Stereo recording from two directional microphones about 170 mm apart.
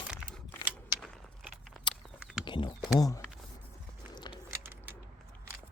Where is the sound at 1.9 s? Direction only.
30° left (ahead or behind).